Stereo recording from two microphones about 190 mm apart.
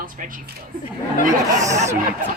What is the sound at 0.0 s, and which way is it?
Speech, 45° right (ahead or behind).